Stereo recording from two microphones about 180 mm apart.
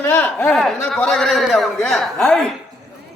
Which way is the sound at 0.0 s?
10° left (ahead or behind).